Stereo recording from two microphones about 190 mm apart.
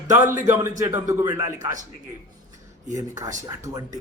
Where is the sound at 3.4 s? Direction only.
20° right (ahead or behind).